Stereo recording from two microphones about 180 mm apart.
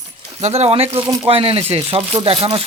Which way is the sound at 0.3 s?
35° right (ahead or behind).